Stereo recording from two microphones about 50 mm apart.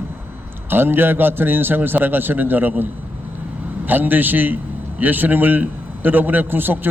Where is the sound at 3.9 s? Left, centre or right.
Right.